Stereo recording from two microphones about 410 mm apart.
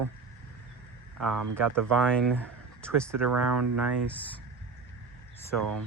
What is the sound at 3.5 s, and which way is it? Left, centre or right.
Speech, right.